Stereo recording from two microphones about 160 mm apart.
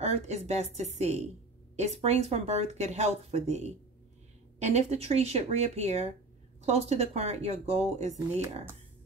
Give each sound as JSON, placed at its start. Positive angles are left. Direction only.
{"t": 0.0, "sound": "speech", "side_deg": -40}